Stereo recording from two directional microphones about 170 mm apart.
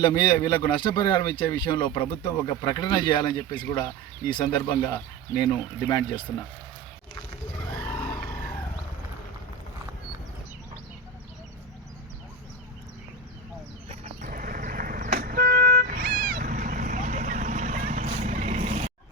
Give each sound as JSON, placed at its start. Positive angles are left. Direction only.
{"t": 0.1, "sound": "speech", "side_deg": 20}
{"t": 7.7, "sound": "vehicle", "side_deg": 10}
{"t": 13.8, "sound": "vehicle", "side_deg": -45}